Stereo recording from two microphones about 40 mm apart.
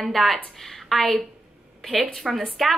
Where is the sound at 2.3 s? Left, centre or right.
Centre.